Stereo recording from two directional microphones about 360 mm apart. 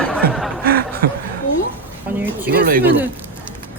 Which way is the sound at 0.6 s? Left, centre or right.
Right.